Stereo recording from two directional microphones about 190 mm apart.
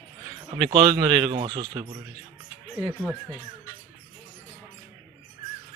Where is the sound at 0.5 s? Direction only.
25° right (ahead or behind).